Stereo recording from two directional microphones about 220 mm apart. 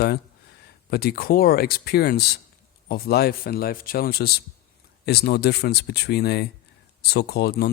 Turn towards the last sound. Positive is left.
turn(degrees=45)  # may be behind; listen again after turning